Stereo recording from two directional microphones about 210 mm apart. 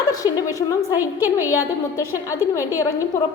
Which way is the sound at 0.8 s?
10° right (ahead or behind).